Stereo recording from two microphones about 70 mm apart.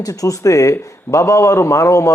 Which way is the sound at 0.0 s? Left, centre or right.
Left.